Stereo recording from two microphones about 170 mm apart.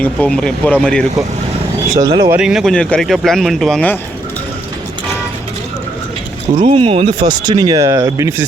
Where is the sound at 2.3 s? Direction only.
5° right (ahead or behind).